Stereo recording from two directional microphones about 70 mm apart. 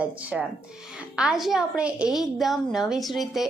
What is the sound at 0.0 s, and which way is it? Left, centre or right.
A woman's voice, centre.